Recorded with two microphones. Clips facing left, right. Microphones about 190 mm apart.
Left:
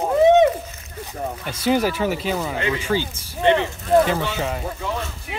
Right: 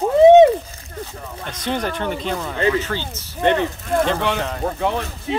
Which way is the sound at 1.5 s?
5° left (ahead or behind).